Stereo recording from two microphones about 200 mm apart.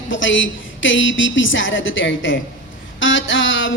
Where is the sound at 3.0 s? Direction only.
70° left (ahead or behind).